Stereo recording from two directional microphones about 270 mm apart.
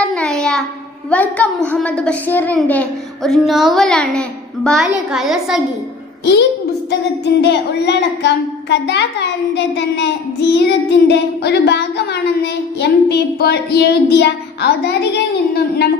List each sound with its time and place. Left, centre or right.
0.1 s child singing: centre
1.1 s a woman's voice: centre
6.9 s child singing: left